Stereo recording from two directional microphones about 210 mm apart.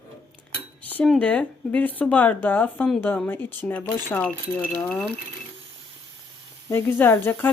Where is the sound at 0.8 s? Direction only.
5° left (ahead or behind).